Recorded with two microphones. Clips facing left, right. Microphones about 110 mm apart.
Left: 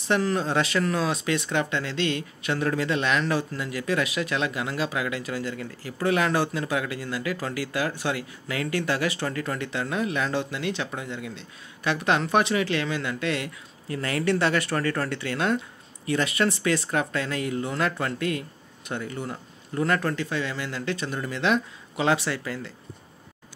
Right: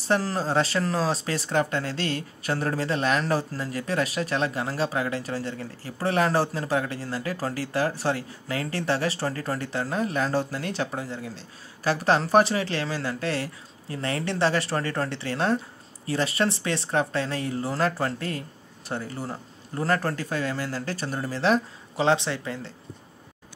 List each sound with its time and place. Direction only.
0.1 s speech: 35° right (ahead or behind)